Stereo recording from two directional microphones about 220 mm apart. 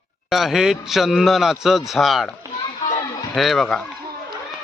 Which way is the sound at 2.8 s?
30° left (ahead or behind).